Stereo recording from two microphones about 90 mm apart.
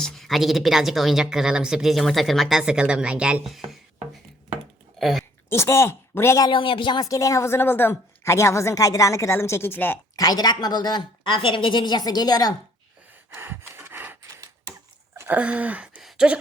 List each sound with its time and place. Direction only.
0.0 s speech: centre (ahead or behind)
4.9 s speech: centre (ahead or behind)
5.5 s speech: 30° left (ahead or behind)
6.5 s speech: 75° left (ahead or behind)
7.0 s a woman's voice: 40° left (ahead or behind); by 10.0 s 25° left (ahead or behind)
10.2 s a woman's voice: 45° left (ahead or behind)
13.3 s a sound: 25° right (ahead or behind)
15.3 s speech: 15° right (ahead or behind)
16.0 s a sound: 5° right (ahead or behind)